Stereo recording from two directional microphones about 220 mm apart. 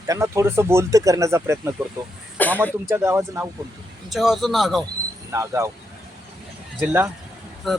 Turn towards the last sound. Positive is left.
turn(degrees=0)  # may be behind; listen again after turning